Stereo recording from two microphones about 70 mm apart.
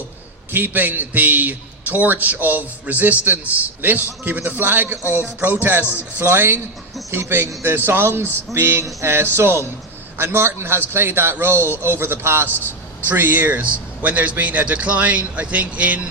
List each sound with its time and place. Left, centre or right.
0.5 s a man's voice: right
12.5 s vehicle: left
13.1 s a man's voice: right